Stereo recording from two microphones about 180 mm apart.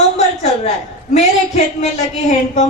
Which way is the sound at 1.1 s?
35° left (ahead or behind).